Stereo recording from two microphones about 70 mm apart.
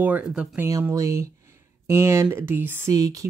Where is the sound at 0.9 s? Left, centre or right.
Right.